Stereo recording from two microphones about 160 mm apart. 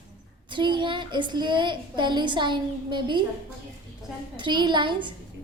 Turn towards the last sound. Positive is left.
turn(degrees=-30)  # may be behind; listen again after turning